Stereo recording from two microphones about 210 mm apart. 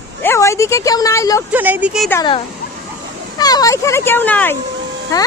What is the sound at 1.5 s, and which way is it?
Speech, 10° right (ahead or behind).